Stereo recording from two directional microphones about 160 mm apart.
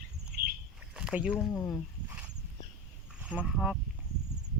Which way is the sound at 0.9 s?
5° right (ahead or behind).